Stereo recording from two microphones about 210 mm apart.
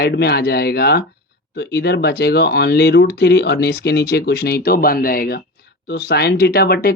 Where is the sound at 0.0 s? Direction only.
50° left (ahead or behind).